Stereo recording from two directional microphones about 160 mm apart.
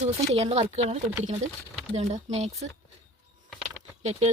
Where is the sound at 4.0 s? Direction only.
45° right (ahead or behind).